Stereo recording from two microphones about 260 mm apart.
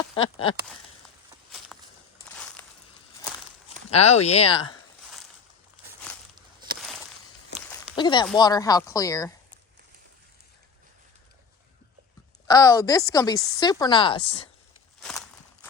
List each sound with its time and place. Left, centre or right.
1.5 s walk: centre
2.3 s crushing: centre
3.9 s speech: left
7.9 s speech: centre
12.5 s speech: centre